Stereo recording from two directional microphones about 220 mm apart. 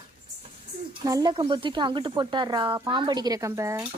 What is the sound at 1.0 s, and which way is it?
Speech, 20° right (ahead or behind).